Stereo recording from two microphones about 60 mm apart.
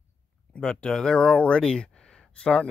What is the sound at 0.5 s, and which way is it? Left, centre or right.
Speech, centre.